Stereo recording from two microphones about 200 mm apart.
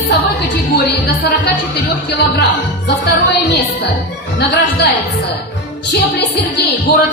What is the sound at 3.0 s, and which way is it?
Speech, 55° left (ahead or behind).